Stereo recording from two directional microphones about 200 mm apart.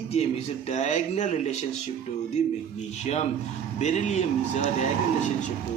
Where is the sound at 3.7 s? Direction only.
35° left (ahead or behind).